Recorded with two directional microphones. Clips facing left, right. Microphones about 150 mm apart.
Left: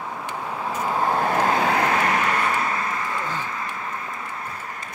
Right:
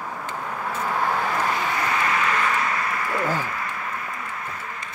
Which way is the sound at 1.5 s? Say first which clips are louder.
Left 5 dB; 60° left (ahead or behind).